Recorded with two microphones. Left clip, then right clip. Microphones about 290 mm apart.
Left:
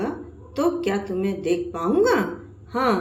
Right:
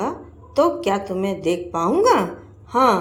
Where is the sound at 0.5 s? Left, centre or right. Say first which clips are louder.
Right 5 dB; right.